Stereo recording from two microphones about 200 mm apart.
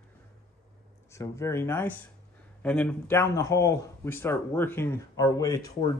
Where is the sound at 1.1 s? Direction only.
15° left (ahead or behind).